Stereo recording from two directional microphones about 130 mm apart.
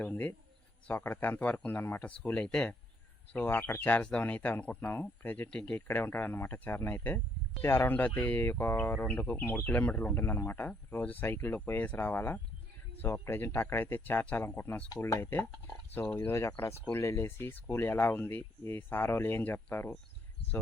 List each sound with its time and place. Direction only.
0.0 s speech: 10° left (ahead or behind)